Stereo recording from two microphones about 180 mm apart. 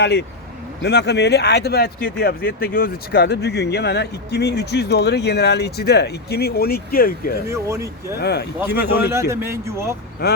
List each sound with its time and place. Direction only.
0.0 s speech: 70° left (ahead or behind)
7.5 s a man's voice: 15° right (ahead or behind)
8.2 s speech: 65° left (ahead or behind)
8.5 s a man's voice: 10° right (ahead or behind)